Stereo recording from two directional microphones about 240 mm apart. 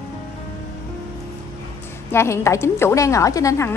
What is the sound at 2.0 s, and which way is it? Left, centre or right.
A woman's voice, centre.